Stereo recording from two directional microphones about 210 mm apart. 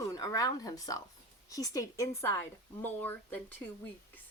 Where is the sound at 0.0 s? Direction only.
15° left (ahead or behind).